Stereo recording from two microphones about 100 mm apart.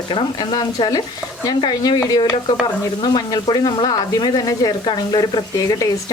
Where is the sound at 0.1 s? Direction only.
50° left (ahead or behind).